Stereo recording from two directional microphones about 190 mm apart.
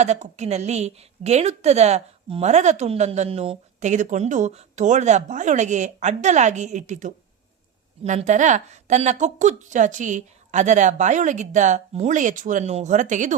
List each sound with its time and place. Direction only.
0.0 s a woman's voice: 35° right (ahead or behind)